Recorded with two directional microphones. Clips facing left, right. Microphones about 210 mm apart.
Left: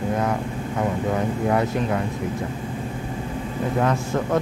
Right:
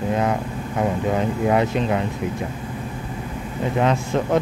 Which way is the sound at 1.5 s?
20° right (ahead or behind).